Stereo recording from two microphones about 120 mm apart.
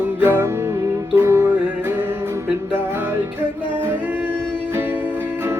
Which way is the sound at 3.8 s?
15° right (ahead or behind).